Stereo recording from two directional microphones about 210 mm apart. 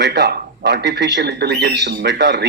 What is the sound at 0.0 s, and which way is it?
A man's voice, 50° right (ahead or behind).